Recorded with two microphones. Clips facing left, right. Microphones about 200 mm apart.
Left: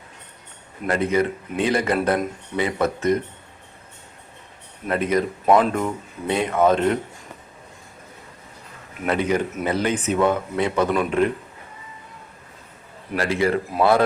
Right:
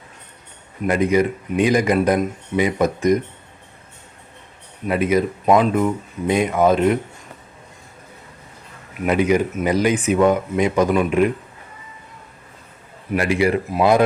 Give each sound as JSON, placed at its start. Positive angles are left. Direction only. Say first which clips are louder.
{"t": 0.9, "sound": "speech", "louder": "right 3 dB", "side_deg": -15}
{"t": 4.9, "sound": "speech", "louder": "right 3 dB", "side_deg": -10}
{"t": 9.0, "sound": "speech", "louder": "right 4 dB", "side_deg": -10}
{"t": 13.1, "sound": "speech", "louder": "right 3 dB", "side_deg": -15}